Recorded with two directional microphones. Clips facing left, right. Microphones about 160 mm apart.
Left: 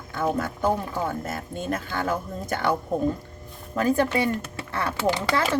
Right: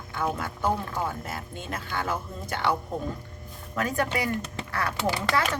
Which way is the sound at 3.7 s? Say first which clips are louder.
Left 6 dB; 30° left (ahead or behind).